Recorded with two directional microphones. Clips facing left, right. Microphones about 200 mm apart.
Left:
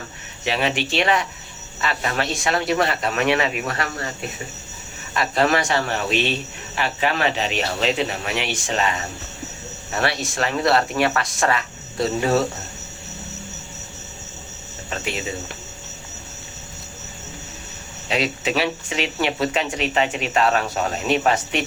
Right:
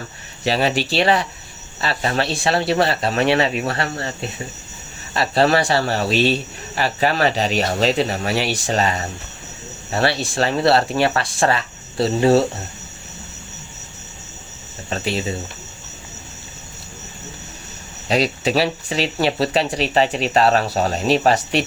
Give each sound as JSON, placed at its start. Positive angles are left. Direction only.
{"t": 0.4, "sound": "speech", "side_deg": -35}
{"t": 5.1, "sound": "speech", "side_deg": -30}
{"t": 14.8, "sound": "speech", "side_deg": -35}
{"t": 18.1, "sound": "speech", "side_deg": -35}